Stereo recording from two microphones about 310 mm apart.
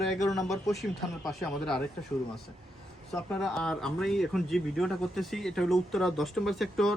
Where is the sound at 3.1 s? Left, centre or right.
Centre.